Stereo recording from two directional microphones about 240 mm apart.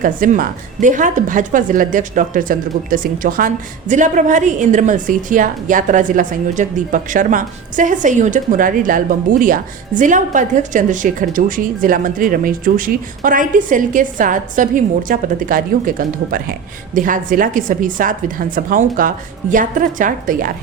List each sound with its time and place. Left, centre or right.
0.0 s speech: right